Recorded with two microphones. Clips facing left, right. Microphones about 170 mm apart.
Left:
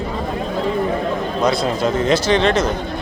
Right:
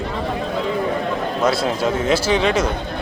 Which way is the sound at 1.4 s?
5° right (ahead or behind).